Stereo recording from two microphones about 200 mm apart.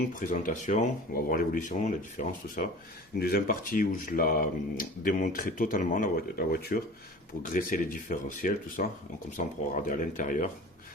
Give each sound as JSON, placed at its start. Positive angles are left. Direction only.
{"t": 0.1, "sound": "speech", "side_deg": 40}